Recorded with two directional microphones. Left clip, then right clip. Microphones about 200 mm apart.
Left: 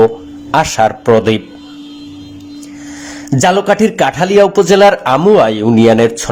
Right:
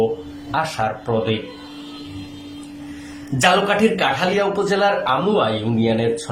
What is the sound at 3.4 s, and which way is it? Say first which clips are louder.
A man's voice: left 5 dB; 35° left (ahead or behind).